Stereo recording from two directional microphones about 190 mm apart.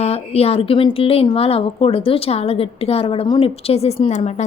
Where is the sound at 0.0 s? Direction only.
30° left (ahead or behind).